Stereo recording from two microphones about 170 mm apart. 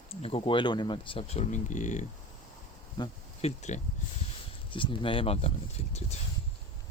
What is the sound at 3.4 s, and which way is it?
Speech, 45° left (ahead or behind).